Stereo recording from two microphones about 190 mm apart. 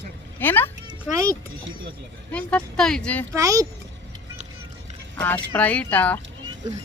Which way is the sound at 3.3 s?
15° right (ahead or behind).